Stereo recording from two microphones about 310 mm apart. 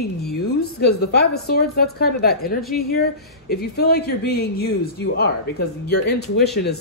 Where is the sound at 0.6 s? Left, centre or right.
Left.